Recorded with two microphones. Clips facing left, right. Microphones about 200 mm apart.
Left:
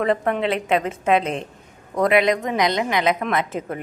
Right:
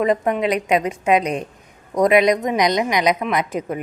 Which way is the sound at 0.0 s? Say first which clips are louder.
Right 2 dB; 15° right (ahead or behind).